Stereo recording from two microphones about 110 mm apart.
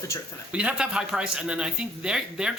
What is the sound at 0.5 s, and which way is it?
Speech, 10° right (ahead or behind).